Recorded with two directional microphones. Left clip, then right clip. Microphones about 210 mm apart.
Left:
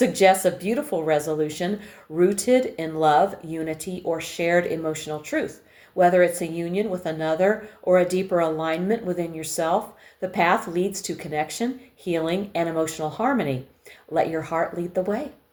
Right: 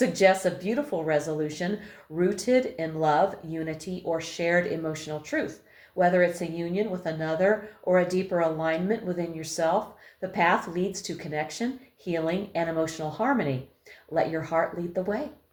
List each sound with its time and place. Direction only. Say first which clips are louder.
0.0 s speech: left 4 dB; 35° left (ahead or behind)